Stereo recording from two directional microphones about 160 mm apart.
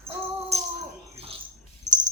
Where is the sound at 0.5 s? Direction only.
40° right (ahead or behind).